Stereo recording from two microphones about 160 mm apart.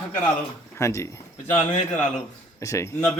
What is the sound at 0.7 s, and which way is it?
Speech, 20° left (ahead or behind).